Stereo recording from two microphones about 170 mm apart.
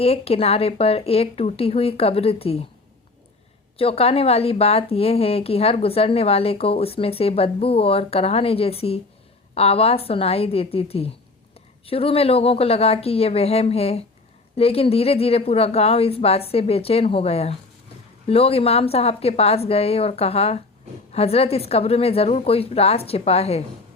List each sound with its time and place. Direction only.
0.0 s speech: 35° left (ahead or behind)
3.8 s speech: 35° left (ahead or behind)